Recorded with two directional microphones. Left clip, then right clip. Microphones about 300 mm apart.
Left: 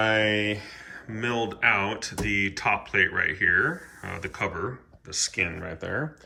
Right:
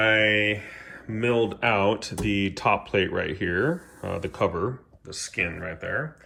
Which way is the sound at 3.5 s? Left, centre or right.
Centre.